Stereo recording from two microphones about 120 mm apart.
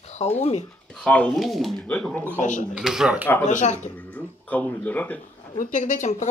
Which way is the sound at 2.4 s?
90° left.